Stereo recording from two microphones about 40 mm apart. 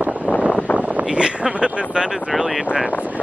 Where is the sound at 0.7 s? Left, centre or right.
Right.